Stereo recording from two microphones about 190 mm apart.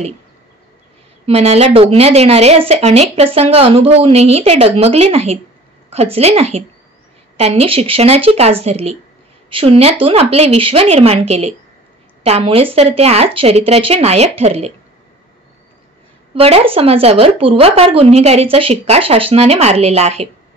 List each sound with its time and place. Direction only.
1.2 s a woman's voice: 30° right (ahead or behind)
16.3 s a woman's voice: 30° right (ahead or behind)